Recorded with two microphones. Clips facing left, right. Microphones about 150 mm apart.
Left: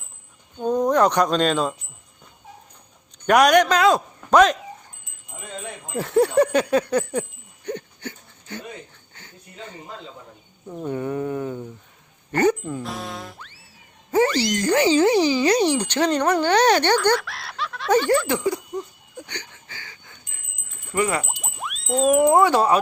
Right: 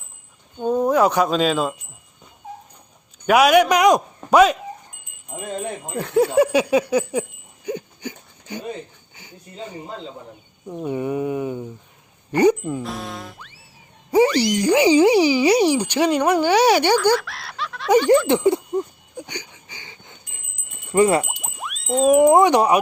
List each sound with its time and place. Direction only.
0.6 s speech: 5° right (ahead or behind)
3.2 s speech: 5° right (ahead or behind)
5.3 s wind chime: 45° right (ahead or behind)
5.9 s a sound: centre (ahead or behind)
9.1 s speech: 10° right (ahead or behind)
12.8 s music: centre (ahead or behind)
14.3 s speech: 10° right (ahead or behind)
17.9 s speech: 15° right (ahead or behind)
18.3 s speech: 25° right (ahead or behind)
19.1 s a sound: 10° right (ahead or behind)
20.9 s speech: 30° right (ahead or behind)
21.4 s a sound: centre (ahead or behind)
22.3 s speech: 20° right (ahead or behind)